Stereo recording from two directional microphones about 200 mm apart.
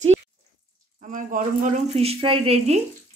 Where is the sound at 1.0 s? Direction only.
40° right (ahead or behind).